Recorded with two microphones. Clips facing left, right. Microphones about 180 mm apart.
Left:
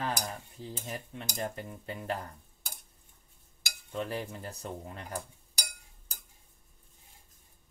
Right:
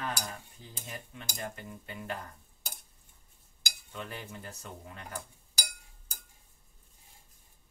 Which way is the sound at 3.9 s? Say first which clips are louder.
Left 7 dB; 35° left (ahead or behind).